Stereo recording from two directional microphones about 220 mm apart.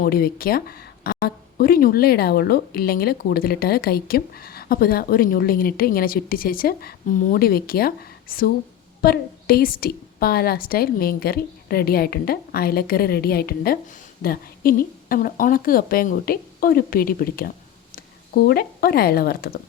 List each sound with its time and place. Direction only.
0.0 s a woman's voice: 40° left (ahead or behind)